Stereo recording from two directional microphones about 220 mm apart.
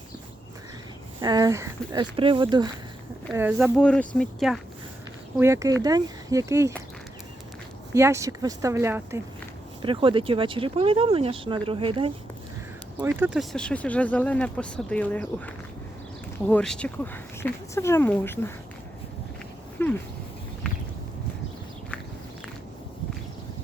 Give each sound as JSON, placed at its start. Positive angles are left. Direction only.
{"t": 1.2, "sound": "speech", "side_deg": -20}
{"t": 3.3, "sound": "speech", "side_deg": -10}
{"t": 3.8, "sound": "speech", "side_deg": 5}
{"t": 5.4, "sound": "speech", "side_deg": -15}
{"t": 7.9, "sound": "speech", "side_deg": -15}
{"t": 9.8, "sound": "speech", "side_deg": -25}
{"t": 13.0, "sound": "speech", "side_deg": -10}
{"t": 19.8, "sound": "speech", "side_deg": 10}